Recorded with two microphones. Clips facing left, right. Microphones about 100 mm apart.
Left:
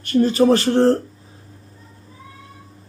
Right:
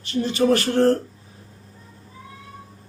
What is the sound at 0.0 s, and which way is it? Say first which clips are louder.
Speech: left 8 dB; 50° left (ahead or behind).